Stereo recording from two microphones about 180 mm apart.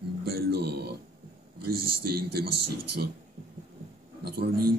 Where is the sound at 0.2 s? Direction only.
60° right (ahead or behind).